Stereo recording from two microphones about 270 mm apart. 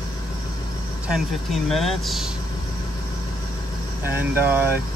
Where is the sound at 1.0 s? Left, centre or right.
Centre.